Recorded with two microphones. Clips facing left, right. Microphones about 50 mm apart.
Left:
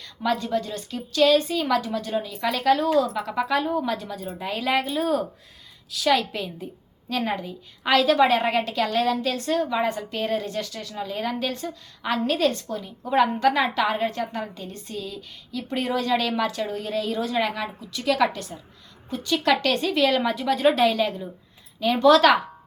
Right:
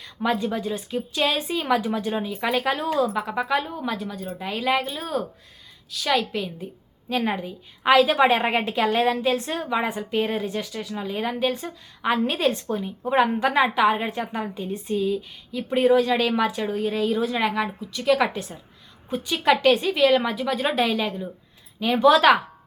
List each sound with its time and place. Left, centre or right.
0.0 s a woman's voice: centre